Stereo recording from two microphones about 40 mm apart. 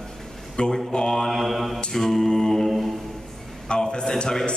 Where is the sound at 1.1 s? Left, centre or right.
Centre.